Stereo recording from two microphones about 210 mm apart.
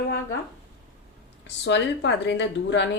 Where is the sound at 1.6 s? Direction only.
55° left (ahead or behind).